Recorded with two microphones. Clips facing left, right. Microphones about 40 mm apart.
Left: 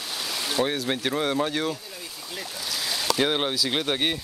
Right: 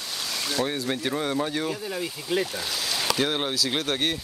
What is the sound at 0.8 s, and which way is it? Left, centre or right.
Speech, centre.